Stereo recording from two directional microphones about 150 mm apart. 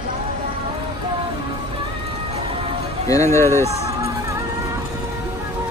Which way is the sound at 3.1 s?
20° left (ahead or behind).